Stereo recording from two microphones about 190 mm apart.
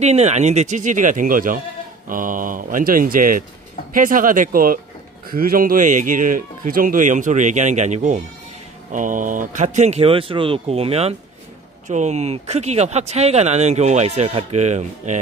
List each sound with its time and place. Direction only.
0.0 s speech: 35° right (ahead or behind)